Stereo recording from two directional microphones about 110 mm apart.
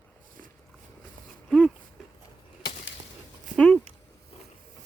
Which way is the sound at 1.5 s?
Centre (ahead or behind).